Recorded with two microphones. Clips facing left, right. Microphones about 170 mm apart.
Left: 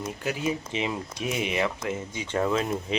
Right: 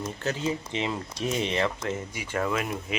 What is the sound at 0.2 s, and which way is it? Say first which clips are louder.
Speech: left 1 dB; 15° left (ahead or behind).